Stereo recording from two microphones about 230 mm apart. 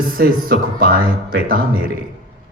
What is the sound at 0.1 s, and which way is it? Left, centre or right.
Speech, right.